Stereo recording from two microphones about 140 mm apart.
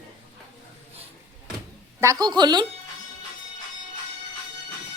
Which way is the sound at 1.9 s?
25° right (ahead or behind).